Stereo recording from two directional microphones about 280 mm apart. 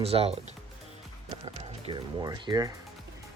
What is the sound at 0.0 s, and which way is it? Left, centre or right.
Speech, right.